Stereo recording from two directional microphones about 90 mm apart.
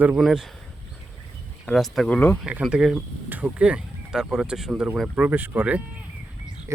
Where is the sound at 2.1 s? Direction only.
15° left (ahead or behind).